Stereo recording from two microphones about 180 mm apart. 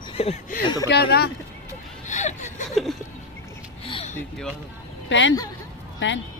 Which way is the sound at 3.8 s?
30° left (ahead or behind).